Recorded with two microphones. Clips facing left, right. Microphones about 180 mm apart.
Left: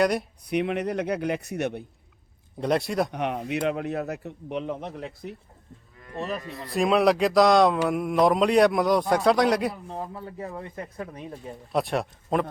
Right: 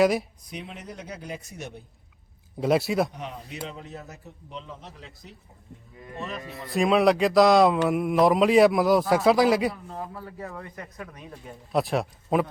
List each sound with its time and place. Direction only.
0.0 s a man's voice: centre (ahead or behind)
0.4 s speech: 65° left (ahead or behind)
2.6 s a man's voice: 5° right (ahead or behind)
3.1 s speech: 65° left (ahead or behind)
6.5 s a man's voice: centre (ahead or behind)
9.9 s speech: 25° left (ahead or behind)
11.7 s a man's voice: centre (ahead or behind)